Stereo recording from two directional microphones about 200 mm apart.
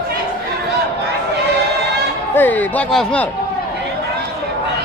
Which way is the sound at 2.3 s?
10° left (ahead or behind).